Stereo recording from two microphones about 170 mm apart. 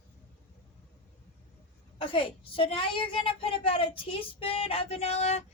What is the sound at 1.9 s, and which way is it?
A woman's voice, 30° left (ahead or behind).